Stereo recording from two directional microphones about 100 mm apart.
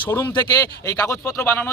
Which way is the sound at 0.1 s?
20° left (ahead or behind).